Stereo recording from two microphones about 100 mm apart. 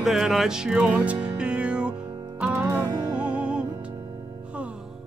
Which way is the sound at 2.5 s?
25° right (ahead or behind).